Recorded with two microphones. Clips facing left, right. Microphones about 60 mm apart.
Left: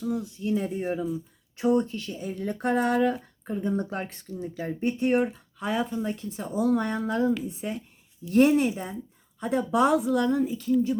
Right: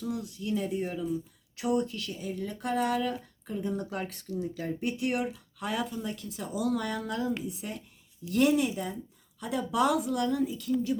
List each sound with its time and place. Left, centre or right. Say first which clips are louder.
0.0 s speech: left 5 dB; left
2.1 s speech: left 5 dB; left
4.8 s speech: left 7 dB; left
8.3 s speech: left 5 dB; left
8.7 s speech: left 1 dB; left